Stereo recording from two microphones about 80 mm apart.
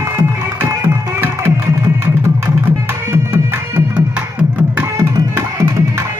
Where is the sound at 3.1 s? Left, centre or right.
Right.